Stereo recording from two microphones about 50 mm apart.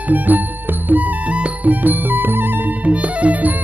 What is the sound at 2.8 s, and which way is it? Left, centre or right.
Music, right.